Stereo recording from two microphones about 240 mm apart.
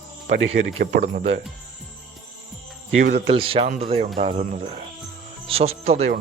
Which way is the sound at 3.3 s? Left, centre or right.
Right.